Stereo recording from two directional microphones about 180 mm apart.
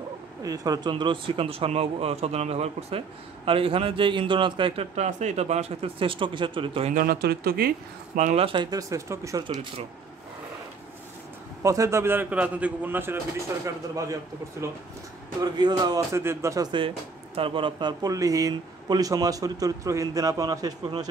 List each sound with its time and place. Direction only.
0.4 s a man's voice: 20° right (ahead or behind)
6.9 s speech: 55° right (ahead or behind)
8.2 s speech: 40° right (ahead or behind)
8.5 s a man's voice: 25° right (ahead or behind)
11.6 s a man's voice: 15° right (ahead or behind)
15.4 s a man's voice: 25° right (ahead or behind)
17.4 s a man's voice: 30° right (ahead or behind)